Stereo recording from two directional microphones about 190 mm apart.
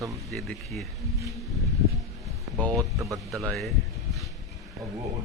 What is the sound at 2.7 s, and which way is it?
Speech, 15° right (ahead or behind).